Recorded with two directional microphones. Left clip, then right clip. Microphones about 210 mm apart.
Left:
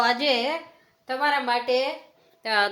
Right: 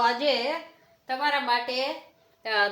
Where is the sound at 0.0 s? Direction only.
40° left (ahead or behind).